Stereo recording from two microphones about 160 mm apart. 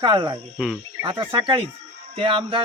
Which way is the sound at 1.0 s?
30° right (ahead or behind).